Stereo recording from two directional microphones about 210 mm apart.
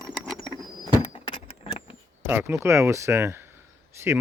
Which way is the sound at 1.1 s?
25° left (ahead or behind).